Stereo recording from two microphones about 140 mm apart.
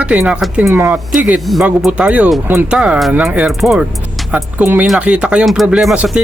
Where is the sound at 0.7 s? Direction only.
20° right (ahead or behind).